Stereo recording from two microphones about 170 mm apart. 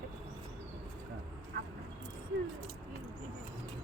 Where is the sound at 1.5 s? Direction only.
70° right (ahead or behind).